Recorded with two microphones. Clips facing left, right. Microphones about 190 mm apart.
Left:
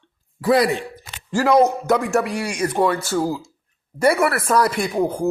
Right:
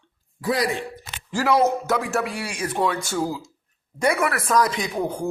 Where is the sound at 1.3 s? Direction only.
15° left (ahead or behind).